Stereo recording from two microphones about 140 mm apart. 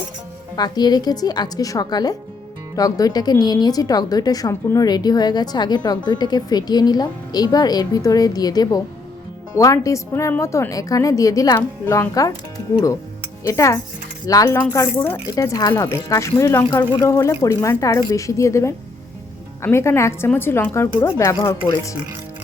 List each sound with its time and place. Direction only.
0.5 s speech: 30° left (ahead or behind)
13.4 s speech: 20° left (ahead or behind)